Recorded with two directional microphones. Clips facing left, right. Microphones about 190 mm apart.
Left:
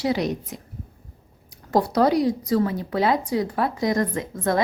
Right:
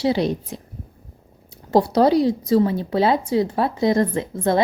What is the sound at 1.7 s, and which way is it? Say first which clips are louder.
Speech: right 3 dB; 30° right (ahead or behind).